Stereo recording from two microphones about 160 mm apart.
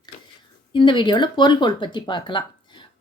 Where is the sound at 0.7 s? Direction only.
30° left (ahead or behind).